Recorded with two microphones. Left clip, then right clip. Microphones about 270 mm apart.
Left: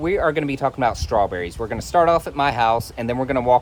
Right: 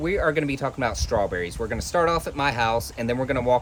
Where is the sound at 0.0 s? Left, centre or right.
Centre.